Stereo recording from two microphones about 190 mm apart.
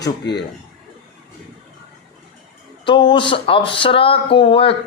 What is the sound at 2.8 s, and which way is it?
Speech, 25° left (ahead or behind).